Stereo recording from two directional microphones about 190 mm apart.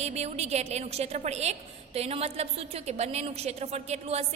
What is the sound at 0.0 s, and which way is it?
A woman's voice, 35° right (ahead or behind).